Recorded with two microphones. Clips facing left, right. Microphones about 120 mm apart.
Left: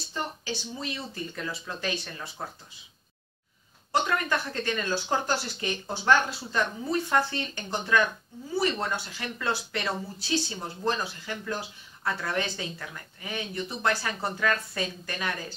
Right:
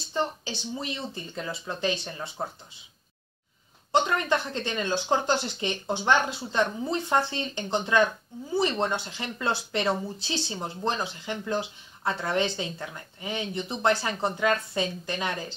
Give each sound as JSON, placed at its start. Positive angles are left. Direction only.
{"t": 0.1, "sound": "speech", "side_deg": -25}
{"t": 3.9, "sound": "speech", "side_deg": -20}